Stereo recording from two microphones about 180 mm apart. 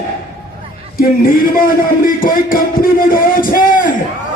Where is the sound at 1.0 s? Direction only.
50° left (ahead or behind).